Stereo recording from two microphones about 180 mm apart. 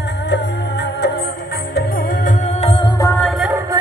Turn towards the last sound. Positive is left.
turn(degrees=0)  # may be behind; listen again after turning